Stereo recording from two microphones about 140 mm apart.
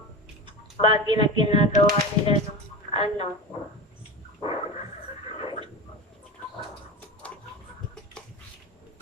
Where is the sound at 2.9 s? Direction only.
40° left (ahead or behind).